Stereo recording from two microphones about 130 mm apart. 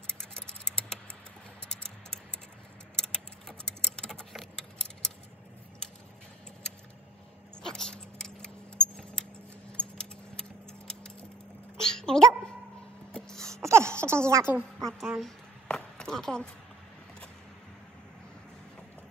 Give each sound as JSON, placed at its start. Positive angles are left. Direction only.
{"t": 0.2, "sound": "a sound", "side_deg": 5}
{"t": 1.7, "sound": "typing", "side_deg": 5}
{"t": 3.0, "sound": "a sound", "side_deg": 5}
{"t": 7.5, "sound": "keys jangling", "side_deg": 5}
{"t": 11.8, "sound": "dog", "side_deg": 5}
{"t": 13.1, "sound": "wail", "side_deg": 5}
{"t": 13.6, "sound": "baby cry", "side_deg": -20}
{"t": 14.3, "sound": "a woman's voice", "side_deg": -20}
{"t": 14.8, "sound": "speech", "side_deg": 5}
{"t": 15.0, "sound": "a sound", "side_deg": 0}